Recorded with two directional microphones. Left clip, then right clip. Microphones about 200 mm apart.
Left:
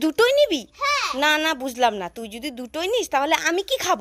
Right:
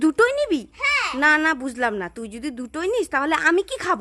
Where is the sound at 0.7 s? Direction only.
10° right (ahead or behind).